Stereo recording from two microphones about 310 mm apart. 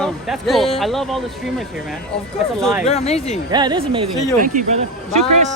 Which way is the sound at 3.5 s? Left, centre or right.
Centre.